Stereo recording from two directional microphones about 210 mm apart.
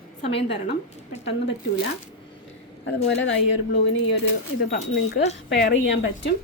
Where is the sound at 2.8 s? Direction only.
55° left (ahead or behind).